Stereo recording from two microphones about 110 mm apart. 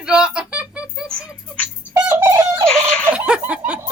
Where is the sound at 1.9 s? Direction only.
15° right (ahead or behind).